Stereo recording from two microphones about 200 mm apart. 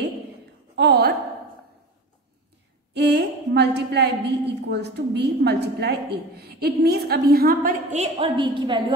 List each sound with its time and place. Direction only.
0.7 s a woman's voice: 60° right (ahead or behind)
2.9 s a woman's voice: 55° right (ahead or behind)
7.9 s a woman's voice: 30° right (ahead or behind)